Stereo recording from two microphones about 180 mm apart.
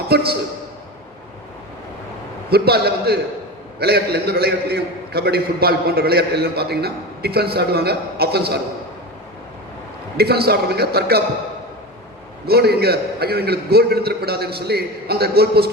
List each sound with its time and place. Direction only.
0.1 s a man's voice: 60° right (ahead or behind)
2.5 s a man's voice: 60° right (ahead or behind)
10.2 s a man's voice: 60° right (ahead or behind)
12.5 s a man's voice: 60° right (ahead or behind)